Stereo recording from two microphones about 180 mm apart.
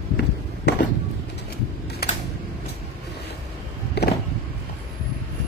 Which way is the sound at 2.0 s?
60° left (ahead or behind).